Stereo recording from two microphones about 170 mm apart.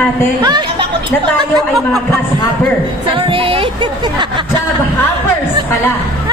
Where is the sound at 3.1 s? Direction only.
30° right (ahead or behind).